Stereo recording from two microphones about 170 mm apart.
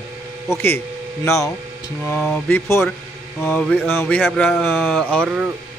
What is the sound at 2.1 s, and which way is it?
A man's voice, 5° left (ahead or behind).